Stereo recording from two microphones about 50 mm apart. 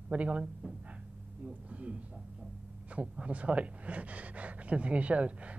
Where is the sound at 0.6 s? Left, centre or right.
Right.